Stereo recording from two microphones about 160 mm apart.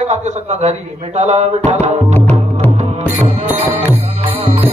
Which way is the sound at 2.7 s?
40° right (ahead or behind).